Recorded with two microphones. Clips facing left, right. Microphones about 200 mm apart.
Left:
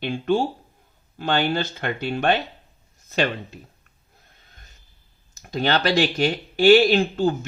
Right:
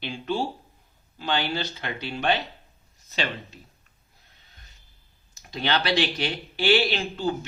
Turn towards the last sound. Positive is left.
turn(degrees=45)  # may be behind; listen again after turning